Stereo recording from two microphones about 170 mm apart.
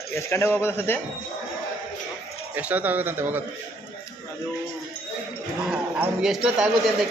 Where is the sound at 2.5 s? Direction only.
10° right (ahead or behind).